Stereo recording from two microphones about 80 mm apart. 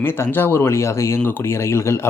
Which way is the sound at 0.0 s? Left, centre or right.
Left.